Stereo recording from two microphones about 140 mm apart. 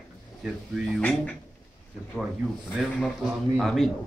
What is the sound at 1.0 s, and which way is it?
Speech, 10° left (ahead or behind).